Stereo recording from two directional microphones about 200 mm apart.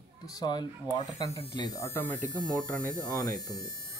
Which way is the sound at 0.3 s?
20° left (ahead or behind).